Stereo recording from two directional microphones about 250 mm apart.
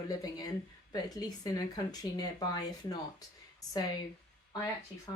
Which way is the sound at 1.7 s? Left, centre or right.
Centre.